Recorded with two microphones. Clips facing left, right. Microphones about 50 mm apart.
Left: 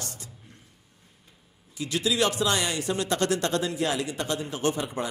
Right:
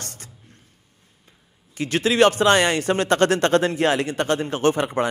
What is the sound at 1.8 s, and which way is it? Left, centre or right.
A man's voice, right.